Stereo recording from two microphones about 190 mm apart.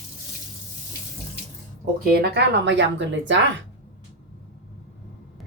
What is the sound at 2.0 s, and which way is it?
A woman's voice, 55° right (ahead or behind).